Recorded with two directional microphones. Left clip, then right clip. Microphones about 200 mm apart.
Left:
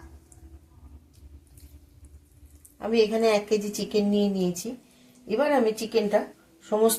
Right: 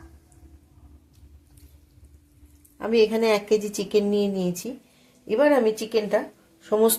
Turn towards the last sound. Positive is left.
turn(degrees=-50)  # may be behind; listen again after turning